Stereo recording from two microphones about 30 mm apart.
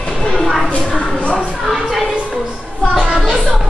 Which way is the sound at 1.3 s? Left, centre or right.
Right.